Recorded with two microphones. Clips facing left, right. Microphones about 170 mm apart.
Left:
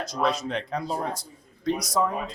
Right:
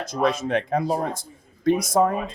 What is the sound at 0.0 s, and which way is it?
Speech, 50° right (ahead or behind).